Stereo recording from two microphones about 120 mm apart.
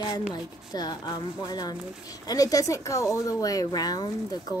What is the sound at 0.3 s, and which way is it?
Speech, 35° left (ahead or behind).